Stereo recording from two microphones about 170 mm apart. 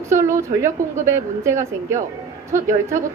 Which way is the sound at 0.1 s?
15° right (ahead or behind).